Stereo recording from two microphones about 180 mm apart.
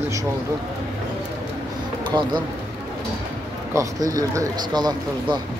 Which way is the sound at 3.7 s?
20° right (ahead or behind).